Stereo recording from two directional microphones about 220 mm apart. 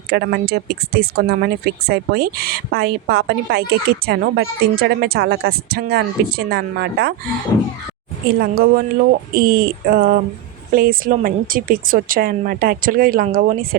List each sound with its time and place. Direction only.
0.1 s speech: 45° right (ahead or behind)
8.3 s speech: 45° right (ahead or behind)